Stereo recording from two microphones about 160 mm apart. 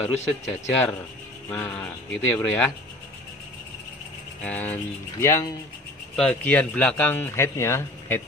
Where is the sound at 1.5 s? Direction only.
10° left (ahead or behind).